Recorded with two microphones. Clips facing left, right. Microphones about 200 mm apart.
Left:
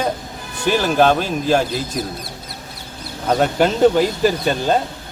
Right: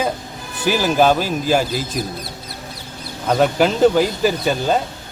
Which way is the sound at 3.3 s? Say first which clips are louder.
Right 1 dB; 5° right (ahead or behind).